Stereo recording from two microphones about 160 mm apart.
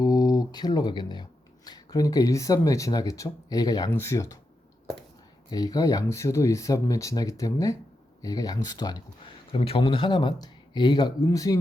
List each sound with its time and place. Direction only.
0.0 s speech: 25° left (ahead or behind)
5.5 s speech: 25° left (ahead or behind)
9.5 s speech: 40° left (ahead or behind); by 11.6 s 20° left (ahead or behind)